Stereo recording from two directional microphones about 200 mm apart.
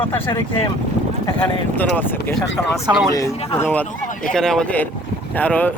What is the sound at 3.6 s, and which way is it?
Speech, 10° left (ahead or behind).